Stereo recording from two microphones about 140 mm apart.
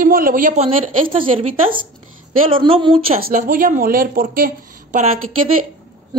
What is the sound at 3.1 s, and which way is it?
A woman's voice, 85° right.